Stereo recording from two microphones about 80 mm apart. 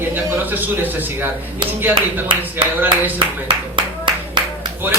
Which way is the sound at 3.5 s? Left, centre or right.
Right.